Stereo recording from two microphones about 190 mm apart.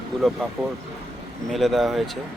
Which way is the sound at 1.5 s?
Centre (ahead or behind).